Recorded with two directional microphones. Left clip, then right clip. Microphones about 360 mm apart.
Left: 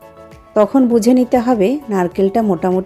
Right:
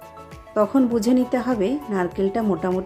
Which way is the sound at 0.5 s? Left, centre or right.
Centre.